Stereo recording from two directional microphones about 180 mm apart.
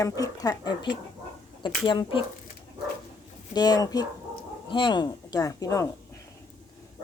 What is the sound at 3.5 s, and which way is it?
A woman's voice, 20° left (ahead or behind).